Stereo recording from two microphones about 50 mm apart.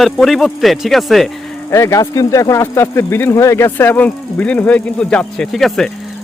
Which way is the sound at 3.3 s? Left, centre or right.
Left.